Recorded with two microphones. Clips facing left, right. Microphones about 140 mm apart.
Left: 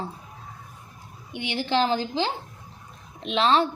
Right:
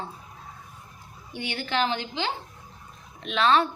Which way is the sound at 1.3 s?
25° left (ahead or behind).